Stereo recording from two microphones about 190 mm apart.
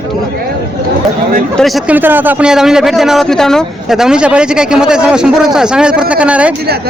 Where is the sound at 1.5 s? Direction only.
Centre (ahead or behind).